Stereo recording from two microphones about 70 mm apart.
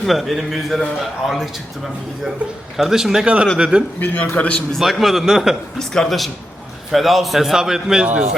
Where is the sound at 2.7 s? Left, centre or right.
Centre.